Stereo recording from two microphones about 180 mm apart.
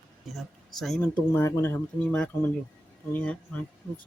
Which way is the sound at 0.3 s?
Centre (ahead or behind).